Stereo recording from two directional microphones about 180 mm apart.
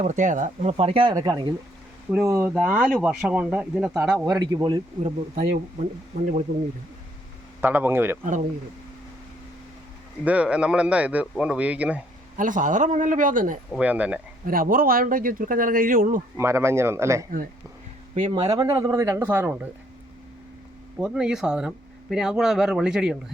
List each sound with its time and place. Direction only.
0.0 s speech: 40° right (ahead or behind); by 2.5 s 15° right (ahead or behind)
2.5 s speech: 5° right (ahead or behind)
4.4 s a man's voice: 25° right (ahead or behind)
7.6 s speech: 10° right (ahead or behind)
10.2 s speech: 5° right (ahead or behind)
12.4 s speech: 45° right (ahead or behind)
13.7 s speech: 10° right (ahead or behind)
14.4 s speech: 50° right (ahead or behind)
16.4 s speech: 15° right (ahead or behind)
18.1 s a man's voice: 25° right (ahead or behind); by 19.5 s 10° right (ahead or behind)
21.0 s speech: 5° right (ahead or behind)